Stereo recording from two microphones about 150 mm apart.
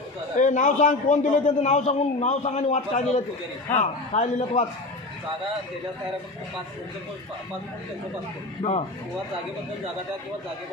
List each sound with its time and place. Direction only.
0.3 s a man's voice: 55° left (ahead or behind)